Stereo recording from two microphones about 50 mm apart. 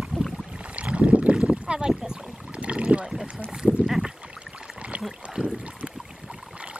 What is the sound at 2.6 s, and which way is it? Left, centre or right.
Boat, right.